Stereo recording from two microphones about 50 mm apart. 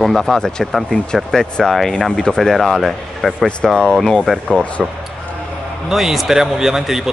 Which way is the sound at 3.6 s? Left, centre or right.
Centre.